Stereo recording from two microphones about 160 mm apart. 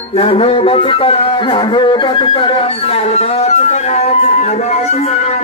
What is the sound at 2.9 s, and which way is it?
Music, 40° left (ahead or behind).